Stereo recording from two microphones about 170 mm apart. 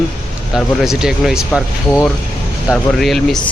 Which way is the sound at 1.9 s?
10° left (ahead or behind).